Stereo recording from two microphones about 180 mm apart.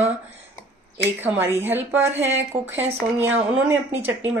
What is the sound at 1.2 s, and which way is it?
Speech, 10° right (ahead or behind).